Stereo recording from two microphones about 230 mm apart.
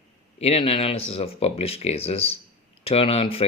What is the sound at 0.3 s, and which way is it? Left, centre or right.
Speech, left.